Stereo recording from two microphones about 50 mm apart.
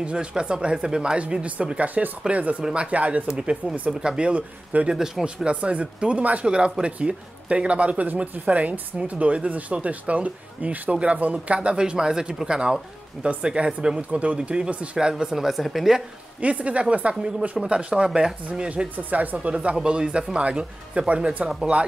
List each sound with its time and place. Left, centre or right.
0.0 s speech: right
3.3 s speech: centre
4.9 s speech: centre
5.2 s speech: right
15.3 s speech: centre
16.3 s speech: right
19.0 s a woman's voice: right
19.3 s speech: right